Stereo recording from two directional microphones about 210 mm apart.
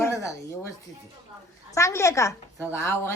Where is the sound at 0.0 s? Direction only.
15° left (ahead or behind).